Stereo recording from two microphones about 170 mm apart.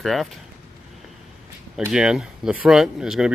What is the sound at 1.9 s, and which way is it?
Speech, 5° right (ahead or behind).